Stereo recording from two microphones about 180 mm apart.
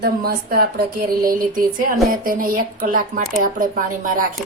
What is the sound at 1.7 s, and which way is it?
A woman's voice, 50° right (ahead or behind).